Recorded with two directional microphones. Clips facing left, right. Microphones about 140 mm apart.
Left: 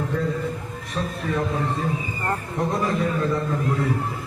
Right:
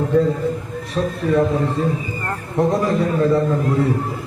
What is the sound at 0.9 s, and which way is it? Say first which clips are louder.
A man's voice: right 8 dB; 35° right (ahead or behind).